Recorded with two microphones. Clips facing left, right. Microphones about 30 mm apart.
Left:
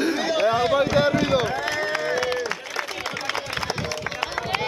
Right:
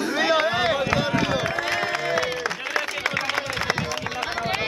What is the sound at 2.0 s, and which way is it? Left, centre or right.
Music, centre.